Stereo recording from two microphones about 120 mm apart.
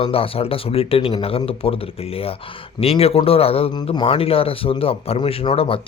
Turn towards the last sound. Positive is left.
turn(degrees=50)  # may be behind; listen again after turning